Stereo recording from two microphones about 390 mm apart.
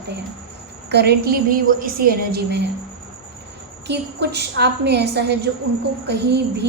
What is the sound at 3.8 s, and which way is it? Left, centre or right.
A woman's voice, right.